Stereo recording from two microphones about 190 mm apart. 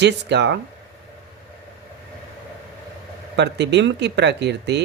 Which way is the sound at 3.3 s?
65° right (ahead or behind).